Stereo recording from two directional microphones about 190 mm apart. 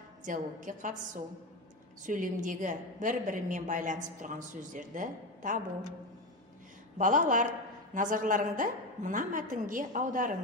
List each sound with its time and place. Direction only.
0.2 s a woman's voice: 45° right (ahead or behind)
2.0 s a woman's voice: 45° right (ahead or behind)
7.0 s a woman's voice: 45° right (ahead or behind)